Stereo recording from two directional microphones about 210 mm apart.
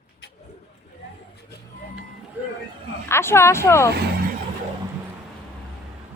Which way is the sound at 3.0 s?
10° left (ahead or behind).